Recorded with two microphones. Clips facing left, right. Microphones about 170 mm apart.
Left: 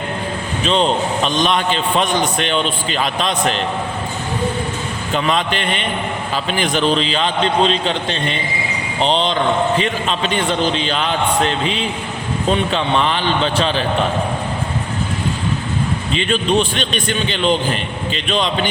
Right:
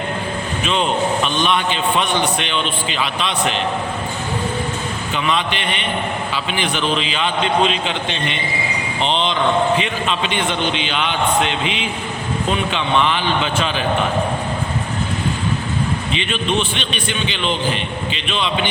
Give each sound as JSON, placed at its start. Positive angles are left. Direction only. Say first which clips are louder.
{"t": 0.6, "sound": "a man's voice", "louder": "left 3 dB", "side_deg": 35}
{"t": 5.1, "sound": "a man's voice", "louder": "left 3 dB", "side_deg": 40}
{"t": 16.1, "sound": "a man's voice", "louder": "left 5 dB", "side_deg": 40}